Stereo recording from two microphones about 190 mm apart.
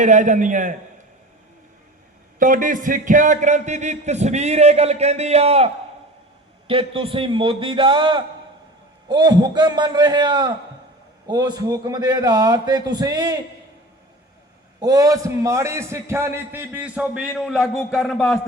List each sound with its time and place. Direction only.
0.0 s a man's voice: 40° right (ahead or behind)
2.4 s a man's voice: 45° right (ahead or behind); by 13.3 s 20° right (ahead or behind)
14.8 s a man's voice: 20° right (ahead or behind); by 18.3 s centre (ahead or behind)